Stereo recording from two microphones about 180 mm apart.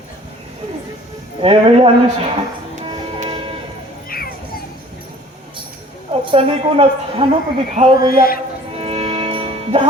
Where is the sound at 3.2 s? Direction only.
30° right (ahead or behind).